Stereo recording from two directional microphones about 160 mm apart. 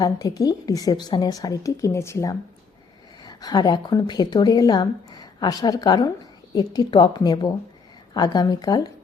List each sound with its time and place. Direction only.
0.0 s a woman's voice: 25° left (ahead or behind)